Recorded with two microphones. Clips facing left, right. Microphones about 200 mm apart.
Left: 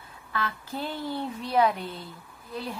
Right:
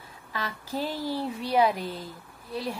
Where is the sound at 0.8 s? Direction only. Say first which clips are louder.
Right 2 dB; 35° right (ahead or behind).